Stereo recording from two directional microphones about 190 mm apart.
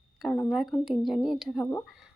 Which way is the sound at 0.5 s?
Centre (ahead or behind).